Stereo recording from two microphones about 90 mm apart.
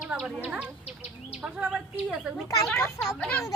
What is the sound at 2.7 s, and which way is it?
Speech, 30° left (ahead or behind).